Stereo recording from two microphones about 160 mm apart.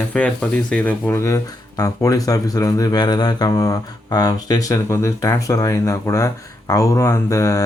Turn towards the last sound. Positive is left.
turn(degrees=20)  # may be behind; listen again after turning